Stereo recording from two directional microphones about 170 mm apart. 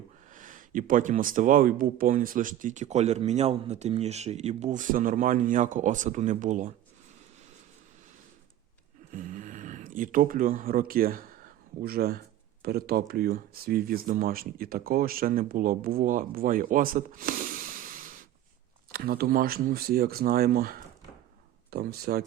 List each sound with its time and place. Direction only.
0.3 s speech: 50° right (ahead or behind)
9.1 s speech: 50° right (ahead or behind)
18.9 s speech: 65° right (ahead or behind)